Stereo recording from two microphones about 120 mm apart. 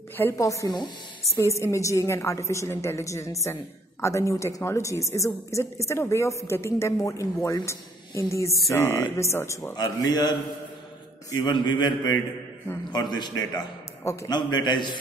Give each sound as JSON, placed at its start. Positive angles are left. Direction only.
{"t": 0.2, "sound": "a woman's voice", "side_deg": 25}
{"t": 1.4, "sound": "a woman's voice", "side_deg": 25}